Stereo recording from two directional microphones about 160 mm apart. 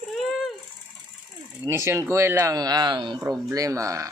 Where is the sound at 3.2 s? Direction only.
20° right (ahead or behind).